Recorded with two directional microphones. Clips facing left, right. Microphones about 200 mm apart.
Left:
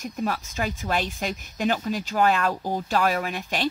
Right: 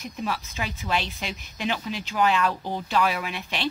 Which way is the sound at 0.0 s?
45° left (ahead or behind).